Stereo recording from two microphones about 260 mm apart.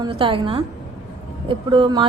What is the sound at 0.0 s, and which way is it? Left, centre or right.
A woman's voice, centre.